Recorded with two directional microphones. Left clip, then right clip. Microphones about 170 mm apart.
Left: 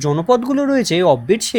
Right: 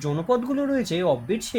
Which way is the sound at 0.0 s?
40° left (ahead or behind).